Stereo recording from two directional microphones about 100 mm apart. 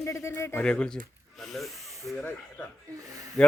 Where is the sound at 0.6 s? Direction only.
10° left (ahead or behind).